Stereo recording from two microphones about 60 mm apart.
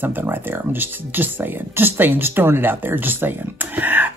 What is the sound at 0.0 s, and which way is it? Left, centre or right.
Speech, right.